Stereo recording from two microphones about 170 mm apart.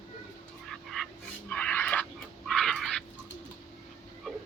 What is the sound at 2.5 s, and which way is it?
Dog, centre (ahead or behind).